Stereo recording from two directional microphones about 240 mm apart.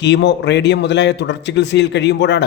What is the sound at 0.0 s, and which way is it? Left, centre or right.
A man's voice, left.